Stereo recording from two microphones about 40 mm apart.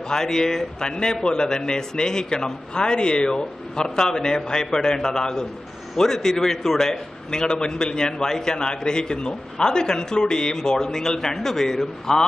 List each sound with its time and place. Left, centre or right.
0.1 s a man's voice: centre